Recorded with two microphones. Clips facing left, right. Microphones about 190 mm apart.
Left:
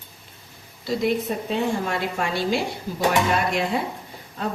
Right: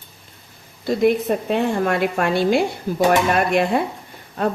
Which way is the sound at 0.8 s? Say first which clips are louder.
Right 6 dB; 55° right (ahead or behind).